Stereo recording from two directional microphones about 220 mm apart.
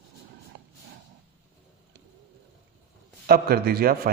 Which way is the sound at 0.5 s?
50° right (ahead or behind).